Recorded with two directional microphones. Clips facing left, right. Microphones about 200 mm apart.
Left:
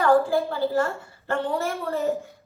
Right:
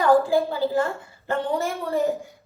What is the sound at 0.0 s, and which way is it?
A woman's voice, 20° right (ahead or behind).